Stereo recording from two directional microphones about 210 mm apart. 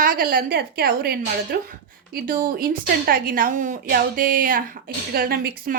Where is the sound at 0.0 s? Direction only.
45° right (ahead or behind).